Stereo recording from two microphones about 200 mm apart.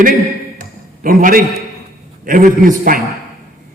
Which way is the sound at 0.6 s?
45° right (ahead or behind).